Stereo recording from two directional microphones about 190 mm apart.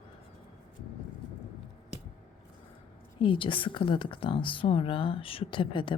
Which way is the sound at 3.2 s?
25° left (ahead or behind).